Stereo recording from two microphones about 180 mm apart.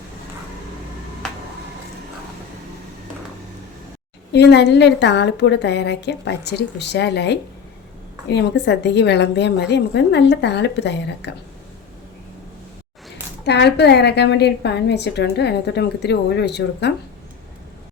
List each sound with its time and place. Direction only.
4.3 s a woman's voice: 70° left (ahead or behind)
13.4 s a woman's voice: 70° left (ahead or behind)